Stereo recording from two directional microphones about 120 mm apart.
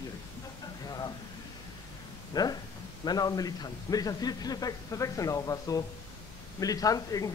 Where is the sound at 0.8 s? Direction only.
35° left (ahead or behind).